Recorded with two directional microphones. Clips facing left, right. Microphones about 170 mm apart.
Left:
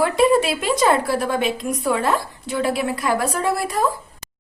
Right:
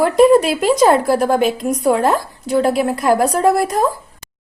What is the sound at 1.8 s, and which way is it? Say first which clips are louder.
A woman's voice: right 6 dB; 40° right (ahead or behind).